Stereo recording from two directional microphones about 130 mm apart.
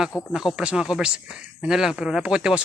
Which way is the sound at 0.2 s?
Centre (ahead or behind).